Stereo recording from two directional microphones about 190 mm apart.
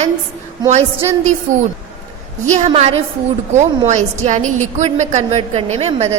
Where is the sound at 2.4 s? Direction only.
35° right (ahead or behind).